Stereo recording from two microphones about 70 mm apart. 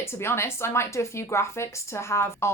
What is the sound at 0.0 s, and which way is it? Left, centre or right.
A woman's voice, left.